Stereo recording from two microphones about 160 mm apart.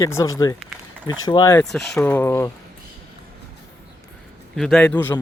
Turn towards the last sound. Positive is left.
turn(degrees=10)  # may be behind; listen again after turning